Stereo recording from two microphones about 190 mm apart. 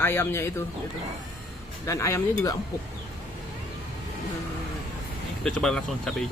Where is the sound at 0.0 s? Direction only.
10° left (ahead or behind).